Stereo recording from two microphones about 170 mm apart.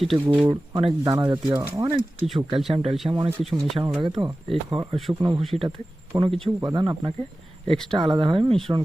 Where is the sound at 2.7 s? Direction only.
35° right (ahead or behind).